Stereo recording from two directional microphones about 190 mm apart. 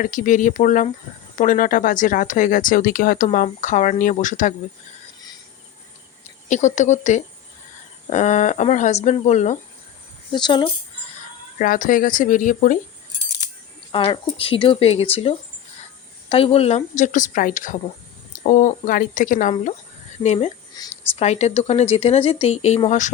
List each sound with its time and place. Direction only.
0.0 s speech: 45° left (ahead or behind)
6.5 s speech: 40° left (ahead or behind)
10.3 s speech: 25° left (ahead or behind)
11.6 s speech: 45° left (ahead or behind)
13.9 s speech: 25° left (ahead or behind)
20.7 s a woman's voice: 15° left (ahead or behind)
21.2 s speech: 35° left (ahead or behind)